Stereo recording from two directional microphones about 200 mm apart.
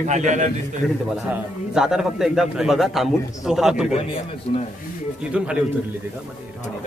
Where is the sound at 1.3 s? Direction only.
5° right (ahead or behind).